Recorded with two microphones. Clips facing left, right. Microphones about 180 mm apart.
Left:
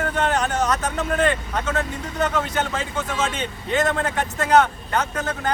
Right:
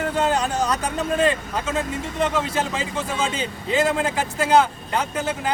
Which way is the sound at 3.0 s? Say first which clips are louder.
Even; 30° right (ahead or behind).